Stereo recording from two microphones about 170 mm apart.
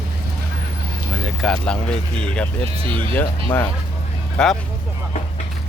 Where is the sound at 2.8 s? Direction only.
30° right (ahead or behind).